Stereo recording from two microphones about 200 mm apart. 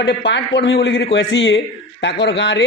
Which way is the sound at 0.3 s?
65° left (ahead or behind).